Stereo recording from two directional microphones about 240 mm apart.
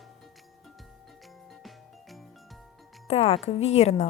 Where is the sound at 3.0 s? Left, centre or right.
Left.